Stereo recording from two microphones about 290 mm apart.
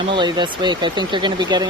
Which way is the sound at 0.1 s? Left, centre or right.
Centre.